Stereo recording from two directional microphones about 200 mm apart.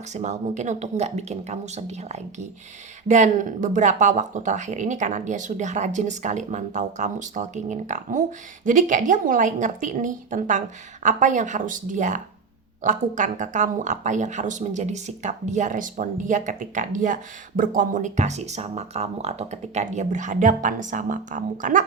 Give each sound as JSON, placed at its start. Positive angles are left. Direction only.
{"t": 0.1, "sound": "speech", "side_deg": -35}